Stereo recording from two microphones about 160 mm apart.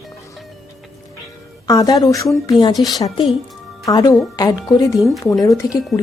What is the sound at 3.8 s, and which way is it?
Speech, 20° left (ahead or behind).